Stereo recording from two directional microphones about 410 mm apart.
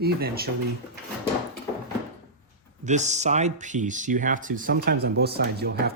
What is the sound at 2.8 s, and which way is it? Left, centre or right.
Speech, centre.